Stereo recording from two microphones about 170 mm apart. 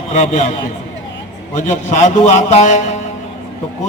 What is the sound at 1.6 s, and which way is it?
A man's voice, 45° left (ahead or behind).